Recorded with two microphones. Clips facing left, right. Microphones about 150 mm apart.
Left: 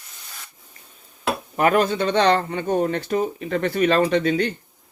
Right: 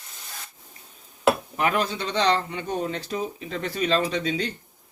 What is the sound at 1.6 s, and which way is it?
Speech, 50° left (ahead or behind).